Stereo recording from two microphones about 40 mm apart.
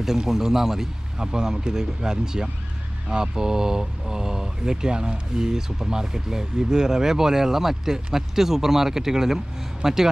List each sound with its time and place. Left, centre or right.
0.0 s speech: centre